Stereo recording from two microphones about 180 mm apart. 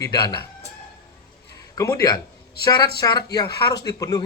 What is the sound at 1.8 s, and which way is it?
A man's voice, 20° left (ahead or behind).